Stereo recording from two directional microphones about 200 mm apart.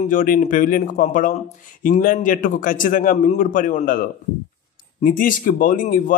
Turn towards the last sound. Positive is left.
turn(degrees=45)  # may be behind; listen again after turning